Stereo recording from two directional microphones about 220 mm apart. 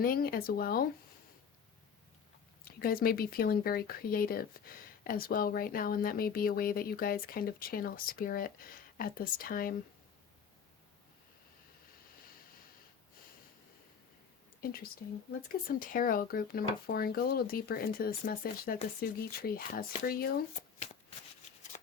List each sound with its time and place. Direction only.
0.0 s speech: 40° left (ahead or behind)
2.7 s speech: 45° left (ahead or behind)
14.6 s speech: 40° left (ahead or behind)